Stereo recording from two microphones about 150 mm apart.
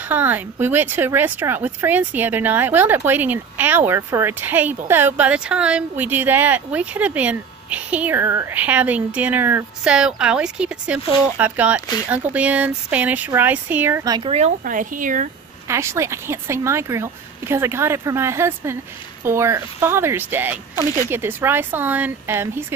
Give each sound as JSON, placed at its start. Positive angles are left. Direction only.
{"t": 0.1, "sound": "speech", "side_deg": -10}
{"t": 14.0, "sound": "speech", "side_deg": -30}
{"t": 14.6, "sound": "speech", "side_deg": -60}
{"t": 15.7, "sound": "speech", "side_deg": -20}